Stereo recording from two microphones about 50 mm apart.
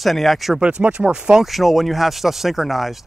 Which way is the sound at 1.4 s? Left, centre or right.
Centre.